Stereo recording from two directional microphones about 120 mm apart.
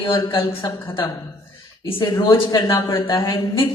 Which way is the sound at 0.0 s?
45° left (ahead or behind).